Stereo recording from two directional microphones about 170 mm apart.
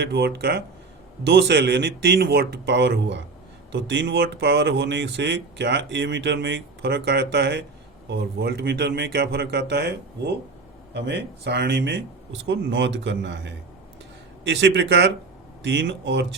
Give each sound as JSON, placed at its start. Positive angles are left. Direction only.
{"t": 0.0, "sound": "speech", "side_deg": -80}
{"t": 1.2, "sound": "speech", "side_deg": -80}